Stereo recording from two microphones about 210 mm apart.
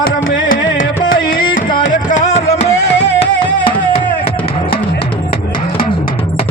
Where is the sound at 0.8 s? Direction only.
45° left (ahead or behind).